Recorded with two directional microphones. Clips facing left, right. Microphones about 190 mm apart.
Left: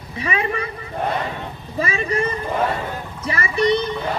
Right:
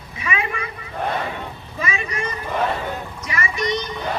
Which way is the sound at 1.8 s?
35° left (ahead or behind).